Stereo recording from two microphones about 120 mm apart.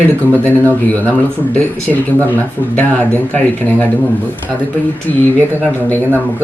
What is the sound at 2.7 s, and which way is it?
Speech, 10° left (ahead or behind).